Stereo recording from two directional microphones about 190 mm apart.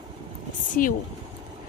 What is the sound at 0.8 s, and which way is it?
Speech, 45° left (ahead or behind).